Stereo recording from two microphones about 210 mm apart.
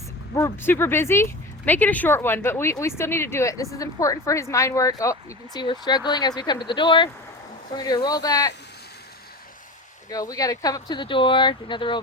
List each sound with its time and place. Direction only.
0.3 s speech: 10° left (ahead or behind)
10.1 s speech: 15° left (ahead or behind)